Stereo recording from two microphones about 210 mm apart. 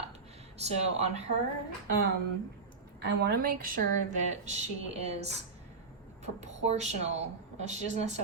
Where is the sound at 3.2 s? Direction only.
45° right (ahead or behind).